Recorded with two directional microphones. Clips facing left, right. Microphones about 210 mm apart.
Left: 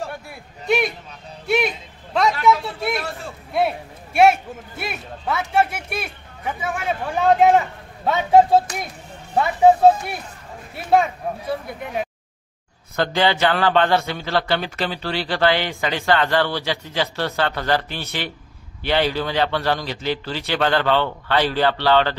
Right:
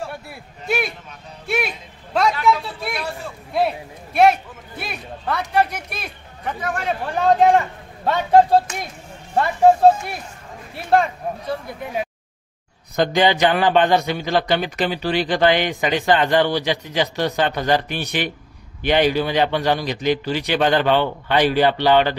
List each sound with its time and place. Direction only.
0.3 s a sound: 5° right (ahead or behind)
2.6 s vehicle: centre (ahead or behind)
3.5 s a sound: centre (ahead or behind)
6.4 s a man's voice: 5° left (ahead or behind)
9.3 s music: centre (ahead or behind)
10.7 s speech: centre (ahead or behind)
12.9 s a man's voice: 15° right (ahead or behind)